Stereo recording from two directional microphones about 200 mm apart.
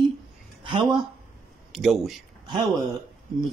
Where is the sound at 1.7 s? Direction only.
Centre (ahead or behind).